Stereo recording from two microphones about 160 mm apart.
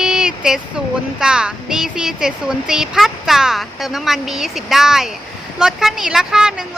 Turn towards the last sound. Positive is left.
turn(degrees=-5)  # may be behind; listen again after turning